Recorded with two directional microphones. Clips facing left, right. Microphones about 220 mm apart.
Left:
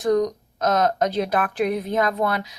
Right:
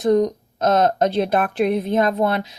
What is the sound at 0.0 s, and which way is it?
Speech, 25° right (ahead or behind).